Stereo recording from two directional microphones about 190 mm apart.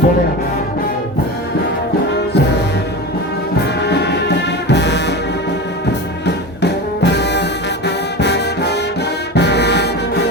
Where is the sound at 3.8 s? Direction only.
60° left (ahead or behind).